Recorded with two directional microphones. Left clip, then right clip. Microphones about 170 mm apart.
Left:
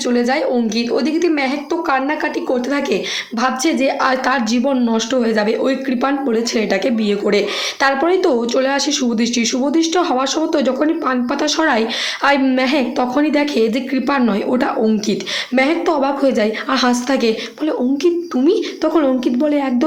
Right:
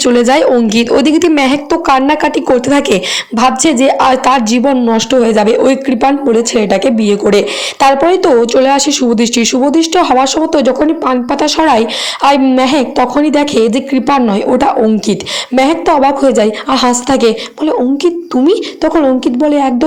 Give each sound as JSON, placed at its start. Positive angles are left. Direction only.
{"t": 0.0, "sound": "a woman's voice", "side_deg": -60}